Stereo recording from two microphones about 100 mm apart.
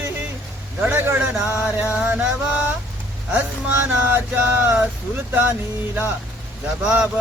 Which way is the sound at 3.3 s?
20° right (ahead or behind).